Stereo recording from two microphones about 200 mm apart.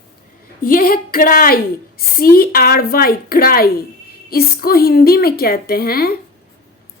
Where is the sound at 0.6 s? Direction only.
45° left (ahead or behind).